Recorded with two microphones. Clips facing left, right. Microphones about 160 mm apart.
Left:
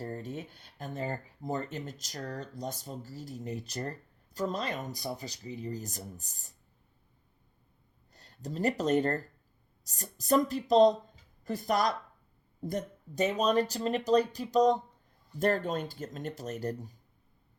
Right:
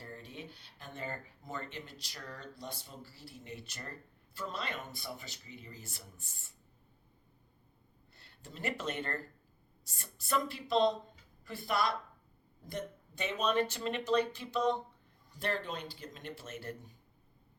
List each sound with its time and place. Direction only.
0.0 s speech: 45° left (ahead or behind)
8.1 s speech: 40° left (ahead or behind)